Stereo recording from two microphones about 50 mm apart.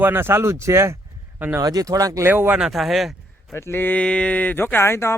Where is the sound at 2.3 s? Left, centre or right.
Right.